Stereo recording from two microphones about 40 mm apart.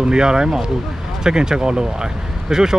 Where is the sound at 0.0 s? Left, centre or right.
Centre.